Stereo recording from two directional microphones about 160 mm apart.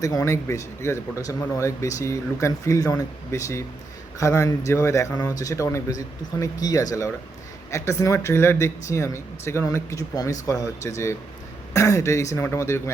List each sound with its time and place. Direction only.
0.0 s speech: 20° left (ahead or behind)